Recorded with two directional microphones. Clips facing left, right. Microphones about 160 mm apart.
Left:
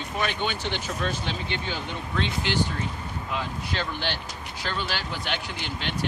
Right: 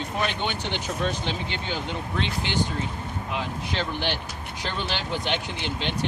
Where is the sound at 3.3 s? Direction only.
15° right (ahead or behind).